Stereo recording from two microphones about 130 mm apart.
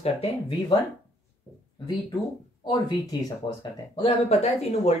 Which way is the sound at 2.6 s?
30° left (ahead or behind).